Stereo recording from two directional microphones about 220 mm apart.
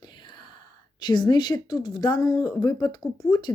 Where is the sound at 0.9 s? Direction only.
20° left (ahead or behind).